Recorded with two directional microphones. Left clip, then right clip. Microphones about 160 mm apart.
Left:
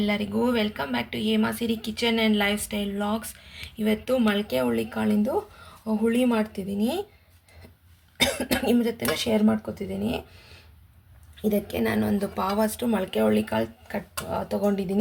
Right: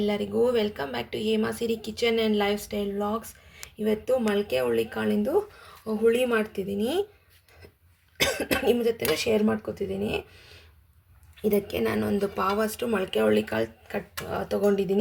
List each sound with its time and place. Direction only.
0.0 s speech: 20° right (ahead or behind)
8.2 s speech: 15° right (ahead or behind)